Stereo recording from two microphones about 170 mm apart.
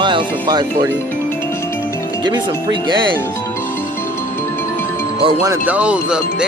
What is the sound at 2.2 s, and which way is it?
Speech, 25° right (ahead or behind).